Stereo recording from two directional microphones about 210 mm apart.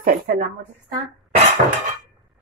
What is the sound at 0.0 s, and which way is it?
Speech, 45° right (ahead or behind).